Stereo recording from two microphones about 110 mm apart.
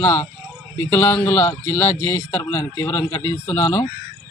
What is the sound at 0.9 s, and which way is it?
A man's voice, 30° left (ahead or behind).